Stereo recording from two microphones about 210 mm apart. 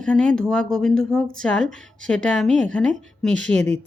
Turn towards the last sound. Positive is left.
turn(degrees=5)  # may be behind; listen again after turning